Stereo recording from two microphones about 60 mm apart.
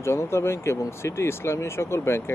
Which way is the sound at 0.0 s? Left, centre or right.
Left.